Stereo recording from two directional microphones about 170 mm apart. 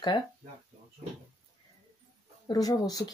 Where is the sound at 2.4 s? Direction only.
20° left (ahead or behind).